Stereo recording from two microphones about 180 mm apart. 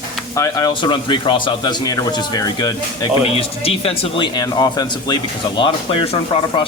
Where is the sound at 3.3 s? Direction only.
35° left (ahead or behind).